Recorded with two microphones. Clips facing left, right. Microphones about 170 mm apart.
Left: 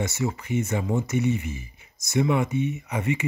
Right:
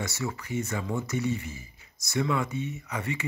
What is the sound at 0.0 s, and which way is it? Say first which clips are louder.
Speech: left 5 dB; 20° left (ahead or behind).